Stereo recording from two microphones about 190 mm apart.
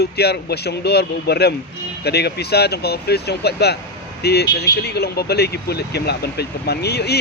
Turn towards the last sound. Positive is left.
turn(degrees=60)  # may be behind; listen again after turning